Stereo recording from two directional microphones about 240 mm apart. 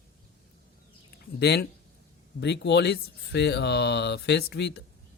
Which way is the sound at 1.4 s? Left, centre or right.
Left.